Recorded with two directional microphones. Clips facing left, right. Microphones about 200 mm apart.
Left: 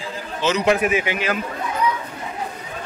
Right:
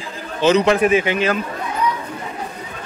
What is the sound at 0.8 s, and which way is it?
Speech, 30° right (ahead or behind).